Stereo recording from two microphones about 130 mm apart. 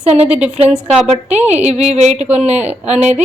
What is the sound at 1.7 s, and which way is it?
Speech, 55° right (ahead or behind).